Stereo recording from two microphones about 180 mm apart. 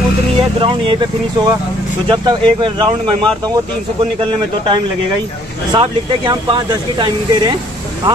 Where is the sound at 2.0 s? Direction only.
25° right (ahead or behind).